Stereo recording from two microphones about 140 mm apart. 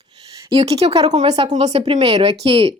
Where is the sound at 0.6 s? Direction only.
45° right (ahead or behind).